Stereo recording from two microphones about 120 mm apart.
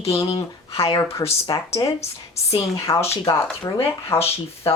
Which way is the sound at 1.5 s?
25° left (ahead or behind).